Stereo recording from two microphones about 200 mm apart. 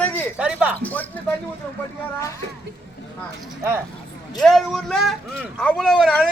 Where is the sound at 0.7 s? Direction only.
10° left (ahead or behind).